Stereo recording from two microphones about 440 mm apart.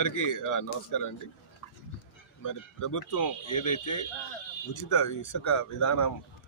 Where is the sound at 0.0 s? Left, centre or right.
Left.